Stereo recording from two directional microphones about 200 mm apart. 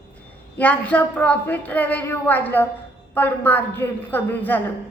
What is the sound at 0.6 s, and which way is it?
A woman's voice, 5° left (ahead or behind).